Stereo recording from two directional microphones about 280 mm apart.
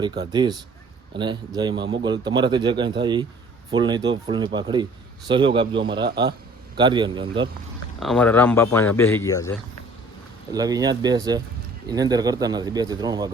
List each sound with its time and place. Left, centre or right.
0.0 s speech: centre
7.9 s speech: centre
10.5 s speech: centre